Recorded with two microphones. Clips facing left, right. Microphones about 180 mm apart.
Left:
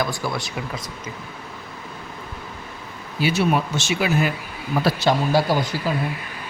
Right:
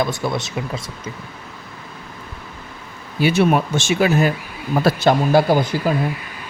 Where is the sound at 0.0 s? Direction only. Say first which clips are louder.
Right 4 dB; 25° right (ahead or behind).